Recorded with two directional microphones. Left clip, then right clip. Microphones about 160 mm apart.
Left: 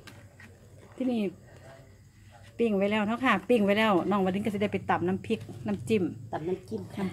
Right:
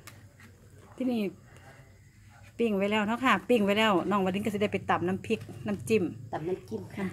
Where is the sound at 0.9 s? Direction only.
Centre (ahead or behind).